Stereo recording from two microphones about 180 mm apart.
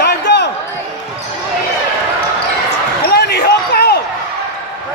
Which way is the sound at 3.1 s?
65° left (ahead or behind).